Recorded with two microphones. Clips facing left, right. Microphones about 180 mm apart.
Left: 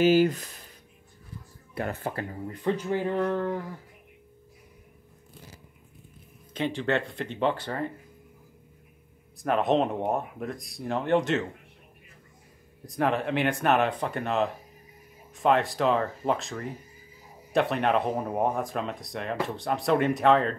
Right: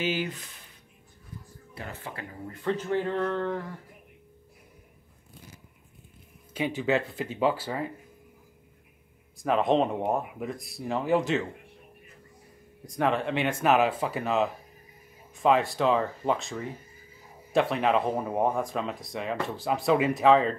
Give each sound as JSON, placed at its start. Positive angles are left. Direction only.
{"t": 0.0, "sound": "speech", "side_deg": 40}
{"t": 1.8, "sound": "speech", "side_deg": 50}
{"t": 2.4, "sound": "speech", "side_deg": 15}
{"t": 6.5, "sound": "speech", "side_deg": -10}
{"t": 9.4, "sound": "speech", "side_deg": 0}
{"t": 12.8, "sound": "speech", "side_deg": 0}